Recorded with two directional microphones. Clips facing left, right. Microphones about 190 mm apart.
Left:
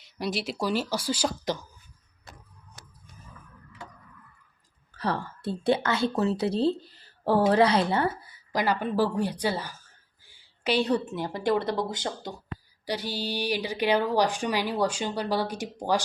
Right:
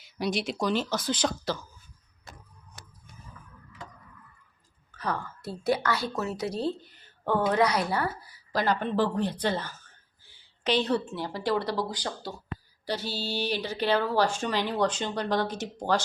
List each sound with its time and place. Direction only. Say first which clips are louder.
0.0 s a woman's voice: right 1 dB; centre (ahead or behind)
4.9 s a woman's voice: left 3 dB; 30° left (ahead or behind)
8.5 s a woman's voice: left 1 dB; 10° left (ahead or behind)
10.2 s a sound: even; 10° left (ahead or behind)
11.1 s a woman's voice: left 2 dB; 20° left (ahead or behind)